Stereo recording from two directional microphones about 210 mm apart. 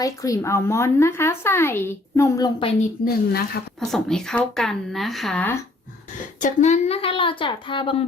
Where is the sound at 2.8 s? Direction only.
45° left (ahead or behind).